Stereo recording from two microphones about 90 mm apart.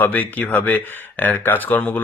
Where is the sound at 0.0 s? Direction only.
20° left (ahead or behind).